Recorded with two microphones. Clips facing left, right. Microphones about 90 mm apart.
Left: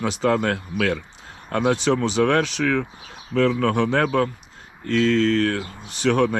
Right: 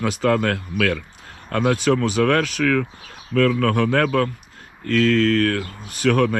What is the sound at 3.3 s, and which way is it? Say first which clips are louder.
Speech: right 1 dB; 25° left (ahead or behind).